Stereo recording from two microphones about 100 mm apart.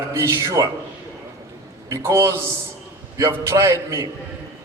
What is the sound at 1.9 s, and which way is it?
A man's voice, 30° right (ahead or behind).